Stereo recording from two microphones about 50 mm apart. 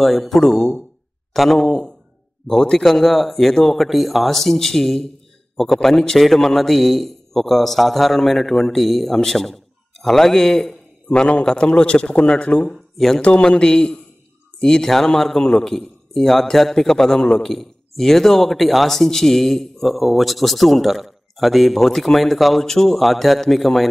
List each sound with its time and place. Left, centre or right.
0.0 s a man's voice: centre
11.1 s a man's voice: left
12.9 s speech: centre
13.2 s a man's voice: left; by 23.9 s centre